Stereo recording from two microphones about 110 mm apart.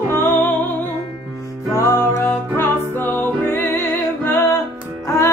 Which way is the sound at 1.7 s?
25° left (ahead or behind).